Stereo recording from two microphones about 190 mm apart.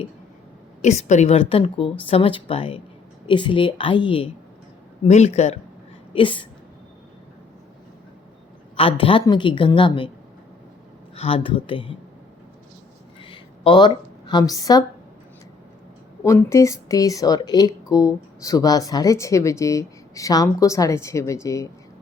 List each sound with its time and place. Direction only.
0.8 s speech: 35° left (ahead or behind)
9.0 s speech: 25° left (ahead or behind)
11.1 s speech: 30° left (ahead or behind)
13.2 s a sound: 25° left (ahead or behind)
16.2 s speech: 15° left (ahead or behind)